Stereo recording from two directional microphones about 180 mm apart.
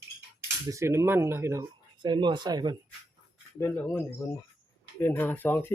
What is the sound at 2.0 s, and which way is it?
Speech, 25° right (ahead or behind).